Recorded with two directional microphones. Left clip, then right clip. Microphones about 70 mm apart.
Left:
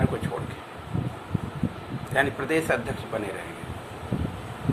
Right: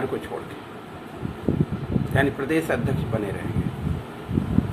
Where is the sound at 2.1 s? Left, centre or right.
Left.